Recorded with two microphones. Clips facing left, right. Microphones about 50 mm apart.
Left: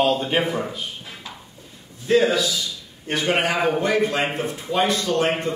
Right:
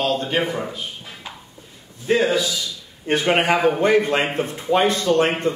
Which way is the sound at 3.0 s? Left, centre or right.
Right.